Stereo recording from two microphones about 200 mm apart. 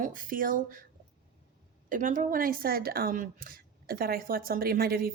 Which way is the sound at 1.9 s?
40° right (ahead or behind).